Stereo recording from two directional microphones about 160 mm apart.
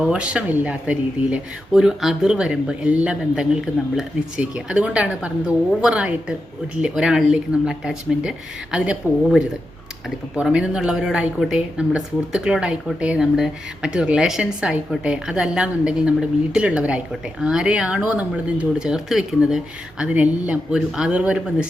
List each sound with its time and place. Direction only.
0.0 s a woman's voice: 10° right (ahead or behind)